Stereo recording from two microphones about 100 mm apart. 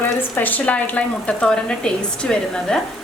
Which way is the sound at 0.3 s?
15° left (ahead or behind).